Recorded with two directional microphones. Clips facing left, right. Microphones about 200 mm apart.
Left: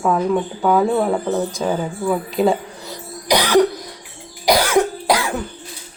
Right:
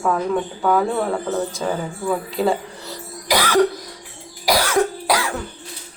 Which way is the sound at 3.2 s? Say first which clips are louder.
Left 2 dB; 20° left (ahead or behind).